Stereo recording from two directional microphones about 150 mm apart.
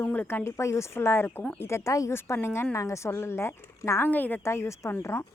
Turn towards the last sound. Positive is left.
turn(degrees=15)  # may be behind; listen again after turning